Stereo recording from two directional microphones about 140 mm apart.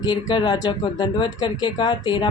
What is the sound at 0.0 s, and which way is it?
Speech, 30° left (ahead or behind).